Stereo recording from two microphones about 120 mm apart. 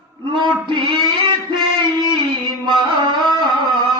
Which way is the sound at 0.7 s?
40° right (ahead or behind).